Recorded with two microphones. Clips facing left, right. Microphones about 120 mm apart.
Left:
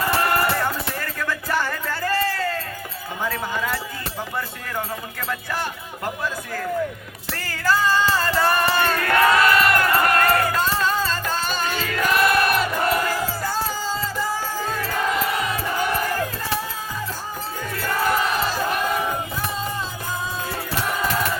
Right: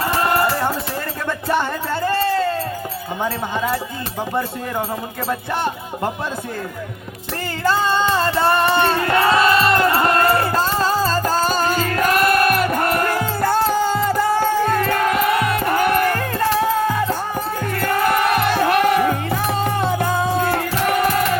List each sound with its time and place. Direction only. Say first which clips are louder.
0.2 s music: right 3 dB; 25° right (ahead or behind)
3.2 s speech: right 3 dB; 25° right (ahead or behind)
7.6 s music: right 2 dB; 25° right (ahead or behind); by 21.2 s 70° right (ahead or behind)